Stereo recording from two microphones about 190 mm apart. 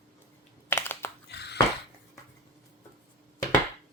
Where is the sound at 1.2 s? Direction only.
60° left (ahead or behind).